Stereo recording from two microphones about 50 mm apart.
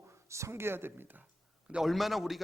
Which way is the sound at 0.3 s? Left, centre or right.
Right.